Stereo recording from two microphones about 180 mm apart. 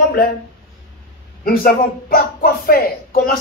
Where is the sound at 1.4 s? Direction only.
55° left (ahead or behind).